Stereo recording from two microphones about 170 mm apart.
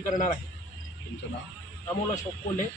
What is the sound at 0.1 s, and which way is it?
Speech, 50° left (ahead or behind).